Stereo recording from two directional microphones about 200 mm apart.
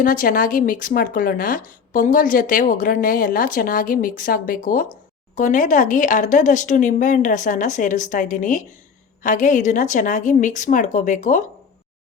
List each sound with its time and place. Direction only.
0.0 s speech: 40° left (ahead or behind)